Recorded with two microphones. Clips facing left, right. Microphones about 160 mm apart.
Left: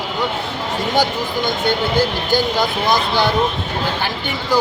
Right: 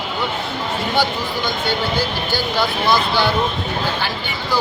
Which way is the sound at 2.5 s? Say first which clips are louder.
Even; 15° left (ahead or behind).